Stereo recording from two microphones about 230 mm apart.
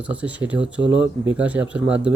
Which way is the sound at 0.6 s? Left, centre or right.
Right.